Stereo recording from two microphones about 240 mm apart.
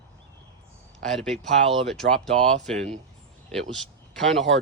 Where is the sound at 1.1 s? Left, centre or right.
Centre.